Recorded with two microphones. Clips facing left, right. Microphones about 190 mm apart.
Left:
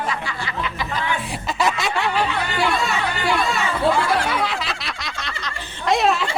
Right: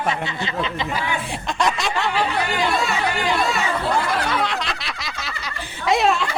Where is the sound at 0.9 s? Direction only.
Centre (ahead or behind).